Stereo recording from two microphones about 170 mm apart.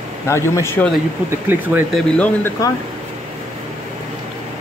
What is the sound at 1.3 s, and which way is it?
Speech, 10° right (ahead or behind).